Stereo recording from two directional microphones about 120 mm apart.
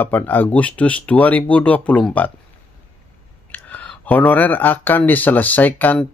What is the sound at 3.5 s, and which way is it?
Speech, 15° left (ahead or behind).